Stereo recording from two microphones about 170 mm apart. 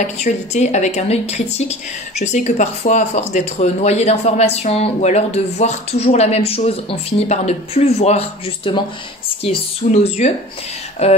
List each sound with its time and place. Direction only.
0.0 s a woman's voice: 45° left (ahead or behind)